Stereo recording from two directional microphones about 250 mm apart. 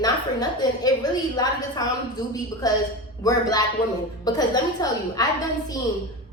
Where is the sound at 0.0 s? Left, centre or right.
Centre.